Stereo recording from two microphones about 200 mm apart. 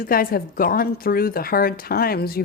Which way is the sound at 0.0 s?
45° left (ahead or behind).